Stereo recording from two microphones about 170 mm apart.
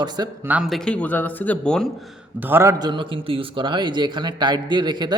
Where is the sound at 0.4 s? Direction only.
5° right (ahead or behind).